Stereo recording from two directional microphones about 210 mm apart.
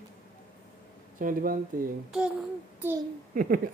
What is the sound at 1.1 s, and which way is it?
Speech, 40° right (ahead or behind).